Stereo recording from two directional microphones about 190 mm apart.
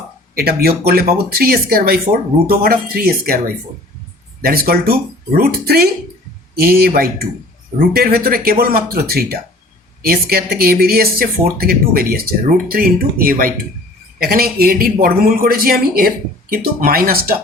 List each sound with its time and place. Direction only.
0.3 s speech: 55° right (ahead or behind)